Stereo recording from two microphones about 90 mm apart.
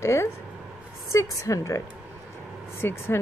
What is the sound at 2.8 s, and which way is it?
Speech, 25° left (ahead or behind).